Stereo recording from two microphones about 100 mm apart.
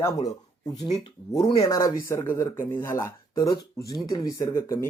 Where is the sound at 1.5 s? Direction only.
30° left (ahead or behind).